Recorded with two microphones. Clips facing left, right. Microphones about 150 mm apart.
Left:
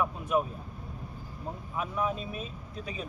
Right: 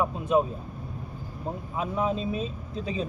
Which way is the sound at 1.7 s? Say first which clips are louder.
Right 4 dB; 25° right (ahead or behind).